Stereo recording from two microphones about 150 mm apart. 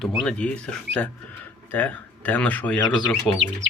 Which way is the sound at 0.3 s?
5° left (ahead or behind).